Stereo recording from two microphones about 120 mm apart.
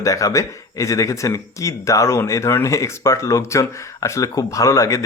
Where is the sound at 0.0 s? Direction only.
30° left (ahead or behind).